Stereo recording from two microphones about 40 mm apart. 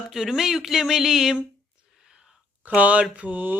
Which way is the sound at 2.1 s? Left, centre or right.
Centre.